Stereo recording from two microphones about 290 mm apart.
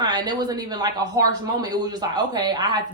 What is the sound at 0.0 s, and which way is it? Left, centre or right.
Speech, centre.